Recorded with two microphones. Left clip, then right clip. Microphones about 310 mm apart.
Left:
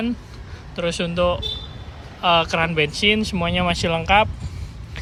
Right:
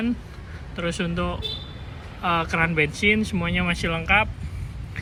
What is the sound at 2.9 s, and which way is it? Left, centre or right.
Speech, left.